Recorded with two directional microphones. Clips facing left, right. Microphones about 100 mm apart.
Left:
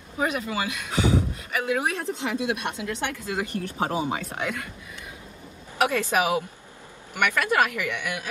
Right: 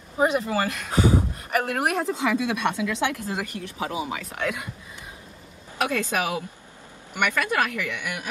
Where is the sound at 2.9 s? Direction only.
90° right.